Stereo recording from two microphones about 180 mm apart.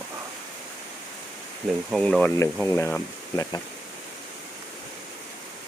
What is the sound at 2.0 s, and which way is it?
Speech, 5° left (ahead or behind).